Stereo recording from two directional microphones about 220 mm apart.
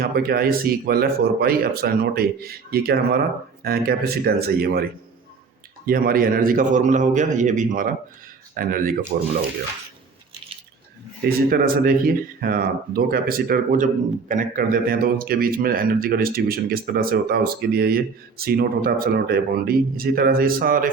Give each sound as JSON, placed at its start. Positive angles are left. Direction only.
{"t": 0.0, "sound": "a man's voice", "side_deg": -45}
{"t": 11.4, "sound": "speech", "side_deg": -40}